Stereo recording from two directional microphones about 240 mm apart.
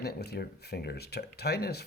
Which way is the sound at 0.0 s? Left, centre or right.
Left.